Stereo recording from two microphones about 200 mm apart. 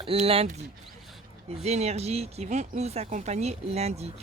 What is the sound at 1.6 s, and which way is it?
A woman's voice, 30° right (ahead or behind).